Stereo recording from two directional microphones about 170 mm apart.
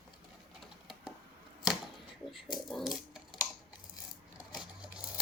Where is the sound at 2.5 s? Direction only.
Centre (ahead or behind).